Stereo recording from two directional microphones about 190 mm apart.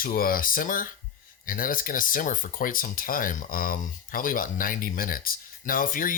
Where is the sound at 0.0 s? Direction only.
50° left (ahead or behind).